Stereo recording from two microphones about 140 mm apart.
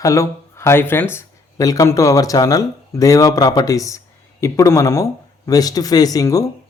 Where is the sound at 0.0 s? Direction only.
20° left (ahead or behind).